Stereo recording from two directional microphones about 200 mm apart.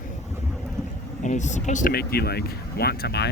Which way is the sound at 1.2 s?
35° left (ahead or behind).